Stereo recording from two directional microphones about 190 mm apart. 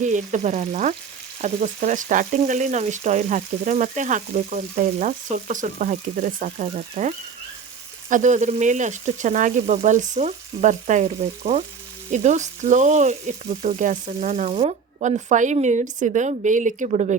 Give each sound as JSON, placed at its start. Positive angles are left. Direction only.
{"t": 0.0, "sound": "frying", "side_deg": -40}
{"t": 8.1, "sound": "frying", "side_deg": -40}